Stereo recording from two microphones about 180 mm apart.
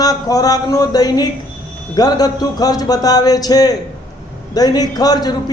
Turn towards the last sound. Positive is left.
turn(degrees=20)  # may be behind; listen again after turning